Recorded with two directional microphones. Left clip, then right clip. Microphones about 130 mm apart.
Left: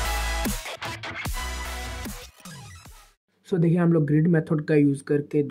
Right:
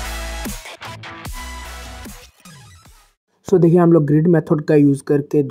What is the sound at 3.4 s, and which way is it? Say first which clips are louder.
Speech: right 11 dB; 40° right (ahead or behind).